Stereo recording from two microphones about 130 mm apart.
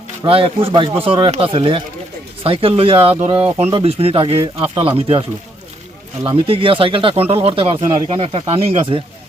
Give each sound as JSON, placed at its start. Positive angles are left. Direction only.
{"t": 0.3, "sound": "speech", "side_deg": -45}
{"t": 6.3, "sound": "speech", "side_deg": -45}